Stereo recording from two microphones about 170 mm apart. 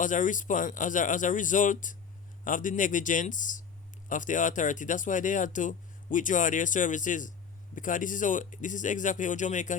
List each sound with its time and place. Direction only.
0.0 s speech: 50° left (ahead or behind)